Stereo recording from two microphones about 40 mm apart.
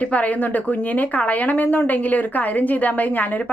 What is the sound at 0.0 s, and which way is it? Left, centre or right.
A woman's voice, left.